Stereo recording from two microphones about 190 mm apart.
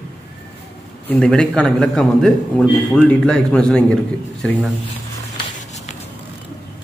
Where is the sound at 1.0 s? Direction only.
5° left (ahead or behind).